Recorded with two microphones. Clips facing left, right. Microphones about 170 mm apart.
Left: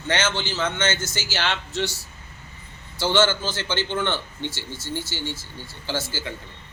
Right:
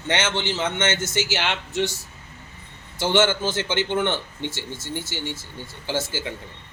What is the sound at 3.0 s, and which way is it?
A man's voice, 20° right (ahead or behind).